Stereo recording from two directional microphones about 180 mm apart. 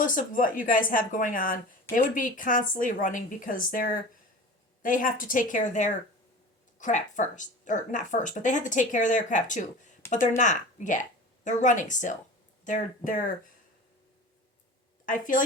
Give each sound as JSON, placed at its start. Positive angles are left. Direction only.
{"t": 0.0, "sound": "a woman's voice", "side_deg": 50}
{"t": 15.0, "sound": "a woman's voice", "side_deg": 45}